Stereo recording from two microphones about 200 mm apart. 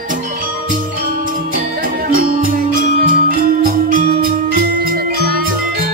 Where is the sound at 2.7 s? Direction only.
45° right (ahead or behind).